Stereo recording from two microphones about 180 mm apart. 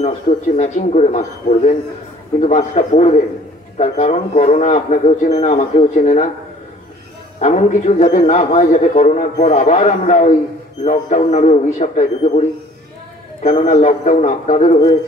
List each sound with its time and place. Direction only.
0.6 s a man's voice: 35° left (ahead or behind)
7.3 s a man's voice: 40° left (ahead or behind)